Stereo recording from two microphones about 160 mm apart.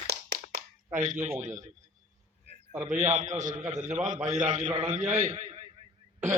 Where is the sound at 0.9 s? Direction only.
50° right (ahead or behind).